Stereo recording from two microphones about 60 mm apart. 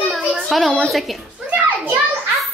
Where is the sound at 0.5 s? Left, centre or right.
Centre.